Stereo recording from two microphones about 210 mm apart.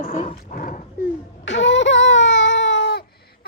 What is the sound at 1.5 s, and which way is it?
Baby cry, 60° left (ahead or behind).